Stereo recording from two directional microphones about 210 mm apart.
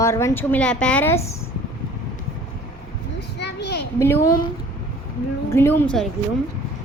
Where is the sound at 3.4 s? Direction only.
55° left (ahead or behind).